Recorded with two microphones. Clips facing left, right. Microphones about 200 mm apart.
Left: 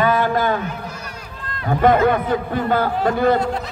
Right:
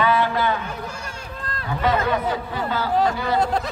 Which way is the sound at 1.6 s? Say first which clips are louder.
Left 7 dB; 50° left (ahead or behind).